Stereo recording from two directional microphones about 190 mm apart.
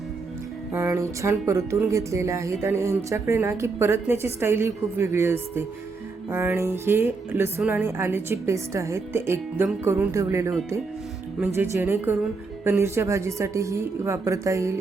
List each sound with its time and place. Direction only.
0.7 s a woman's voice: 15° right (ahead or behind)